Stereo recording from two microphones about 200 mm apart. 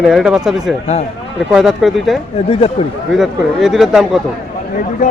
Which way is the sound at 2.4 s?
30° left (ahead or behind).